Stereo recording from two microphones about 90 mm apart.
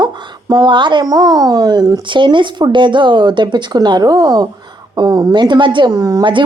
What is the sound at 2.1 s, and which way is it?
A woman's voice, 65° right (ahead or behind).